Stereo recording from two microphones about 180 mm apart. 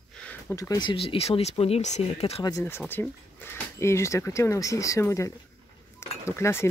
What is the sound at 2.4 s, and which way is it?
Speech, 20° left (ahead or behind).